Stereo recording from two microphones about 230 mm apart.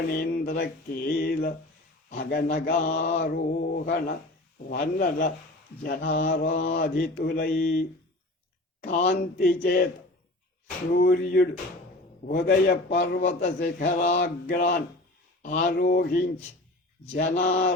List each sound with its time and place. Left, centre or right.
0.1 s mantra: left
10.9 s mantra: left
17.2 s mantra: left